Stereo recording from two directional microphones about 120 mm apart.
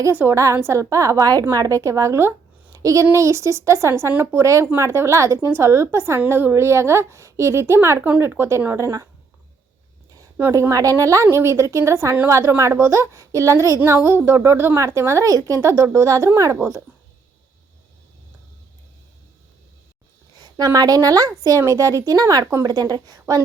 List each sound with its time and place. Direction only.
0.1 s a woman's voice: 15° right (ahead or behind)
10.3 s a woman's voice: 20° right (ahead or behind)
20.4 s a woman's voice: 30° right (ahead or behind)